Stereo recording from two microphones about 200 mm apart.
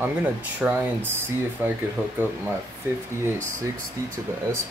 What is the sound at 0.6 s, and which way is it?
Speech, 10° right (ahead or behind).